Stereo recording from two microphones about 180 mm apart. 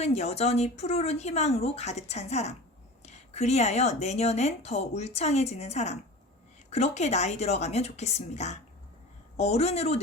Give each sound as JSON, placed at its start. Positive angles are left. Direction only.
{"t": 0.0, "sound": "a woman's voice", "side_deg": 35}